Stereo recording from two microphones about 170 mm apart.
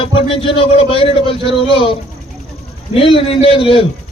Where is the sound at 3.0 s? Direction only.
30° left (ahead or behind).